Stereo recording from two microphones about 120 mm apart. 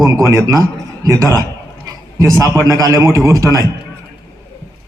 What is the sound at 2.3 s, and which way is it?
A man's voice, 25° right (ahead or behind).